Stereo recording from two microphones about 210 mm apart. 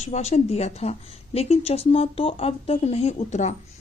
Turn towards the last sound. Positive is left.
turn(degrees=35)  # may be behind; listen again after turning